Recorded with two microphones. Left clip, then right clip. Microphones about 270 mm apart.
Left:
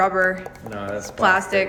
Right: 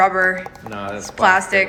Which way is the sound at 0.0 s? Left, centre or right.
Centre.